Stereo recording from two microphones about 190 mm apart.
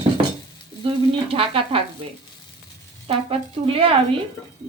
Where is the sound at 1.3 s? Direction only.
30° right (ahead or behind).